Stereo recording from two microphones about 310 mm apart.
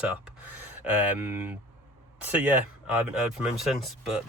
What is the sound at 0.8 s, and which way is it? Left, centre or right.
Speech, centre.